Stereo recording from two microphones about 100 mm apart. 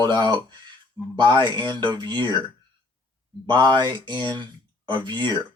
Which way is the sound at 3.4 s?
50° right (ahead or behind).